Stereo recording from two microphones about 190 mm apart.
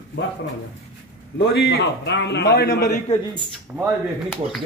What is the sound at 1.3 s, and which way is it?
A man's voice, 55° left (ahead or behind).